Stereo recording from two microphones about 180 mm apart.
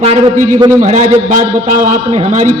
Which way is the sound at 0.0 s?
40° right (ahead or behind).